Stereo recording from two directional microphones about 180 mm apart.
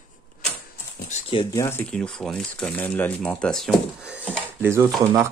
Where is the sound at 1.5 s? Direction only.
10° left (ahead or behind); by 4.2 s 5° right (ahead or behind).